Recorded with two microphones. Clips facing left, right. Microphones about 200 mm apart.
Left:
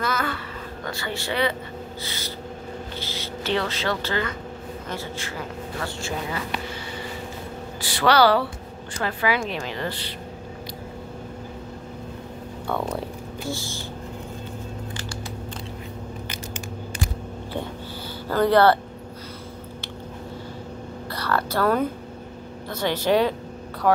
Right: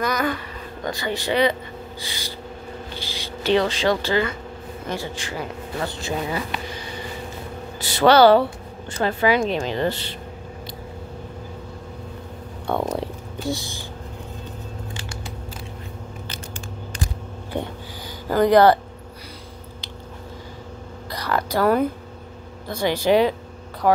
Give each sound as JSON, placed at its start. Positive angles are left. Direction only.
{"t": 0.0, "sound": "speech", "side_deg": -15}
{"t": 7.8, "sound": "speech", "side_deg": -25}
{"t": 13.0, "sound": "stomach rumble", "side_deg": -20}
{"t": 18.3, "sound": "speech", "side_deg": -15}
{"t": 21.1, "sound": "a sound", "side_deg": -15}
{"t": 22.7, "sound": "speech", "side_deg": -10}